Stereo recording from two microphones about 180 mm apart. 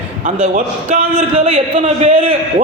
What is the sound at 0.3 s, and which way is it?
A man's voice, 40° right (ahead or behind).